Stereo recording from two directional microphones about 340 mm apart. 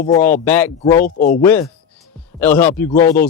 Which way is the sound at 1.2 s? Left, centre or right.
Left.